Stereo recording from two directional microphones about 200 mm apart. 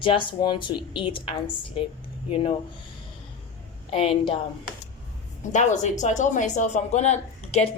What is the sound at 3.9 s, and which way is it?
Speech, 25° left (ahead or behind).